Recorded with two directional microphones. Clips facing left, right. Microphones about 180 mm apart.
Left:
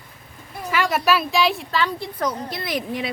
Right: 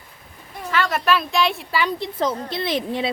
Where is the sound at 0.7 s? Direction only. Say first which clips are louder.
Left 1 dB; 10° left (ahead or behind).